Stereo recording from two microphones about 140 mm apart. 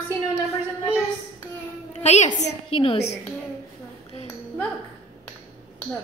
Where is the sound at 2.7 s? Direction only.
45° left (ahead or behind).